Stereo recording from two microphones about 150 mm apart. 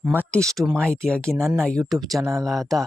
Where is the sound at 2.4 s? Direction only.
Centre (ahead or behind).